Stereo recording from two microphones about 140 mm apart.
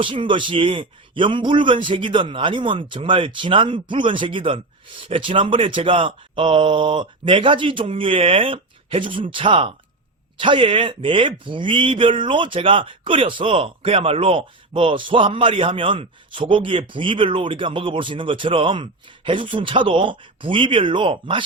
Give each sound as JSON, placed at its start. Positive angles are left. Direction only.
{"t": 0.0, "sound": "speech", "side_deg": -35}